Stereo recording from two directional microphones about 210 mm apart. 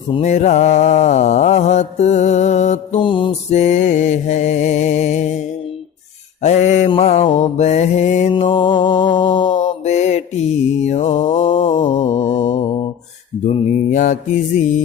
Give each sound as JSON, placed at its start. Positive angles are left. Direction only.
{"t": 0.1, "sound": "mantra", "side_deg": 35}
{"t": 6.4, "sound": "mantra", "side_deg": 30}
{"t": 8.3, "sound": "mantra", "side_deg": 25}
{"t": 9.6, "sound": "mantra", "side_deg": 35}
{"t": 11.7, "sound": "mantra", "side_deg": 35}
{"t": 13.4, "sound": "mantra", "side_deg": 35}